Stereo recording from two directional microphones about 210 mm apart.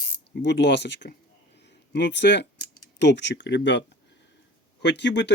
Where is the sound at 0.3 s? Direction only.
55° left (ahead or behind).